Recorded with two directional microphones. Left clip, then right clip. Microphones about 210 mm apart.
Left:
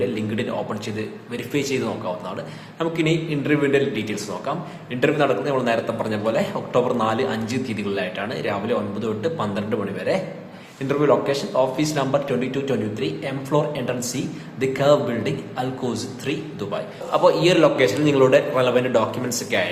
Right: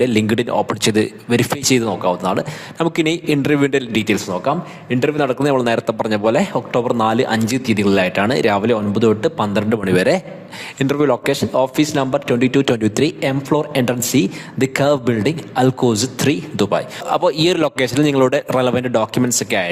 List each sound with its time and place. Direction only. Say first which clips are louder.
0.0 s a man's voice: right 8 dB; 55° right (ahead or behind)